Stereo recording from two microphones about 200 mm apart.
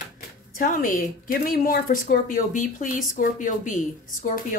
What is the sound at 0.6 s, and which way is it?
A woman's voice, 45° left (ahead or behind).